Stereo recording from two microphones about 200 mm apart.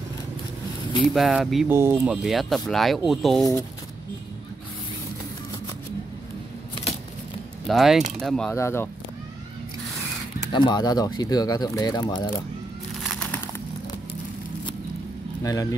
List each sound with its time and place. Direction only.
1.0 s speech: centre (ahead or behind)
1.7 s speech: 10° right (ahead or behind)
2.2 s speech: centre (ahead or behind)
7.6 s speech: centre (ahead or behind)
10.5 s speech: 20° left (ahead or behind)
13.0 s crumpling: centre (ahead or behind)
15.4 s speech: 15° left (ahead or behind)